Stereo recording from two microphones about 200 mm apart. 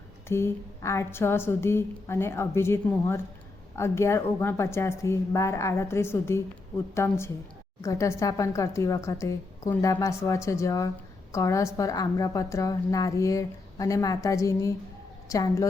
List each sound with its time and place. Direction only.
0.3 s a woman's voice: 10° left (ahead or behind)